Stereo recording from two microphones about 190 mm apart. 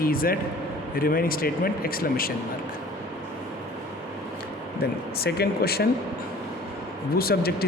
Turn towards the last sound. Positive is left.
turn(degrees=55)  # may be behind; listen again after turning